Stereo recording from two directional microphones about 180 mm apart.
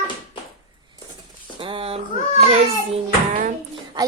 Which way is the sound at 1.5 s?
30° right (ahead or behind).